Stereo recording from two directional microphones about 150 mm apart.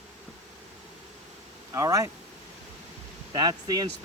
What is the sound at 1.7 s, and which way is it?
Speech, 20° right (ahead or behind).